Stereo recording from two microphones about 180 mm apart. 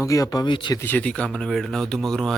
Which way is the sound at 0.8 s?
10° left (ahead or behind).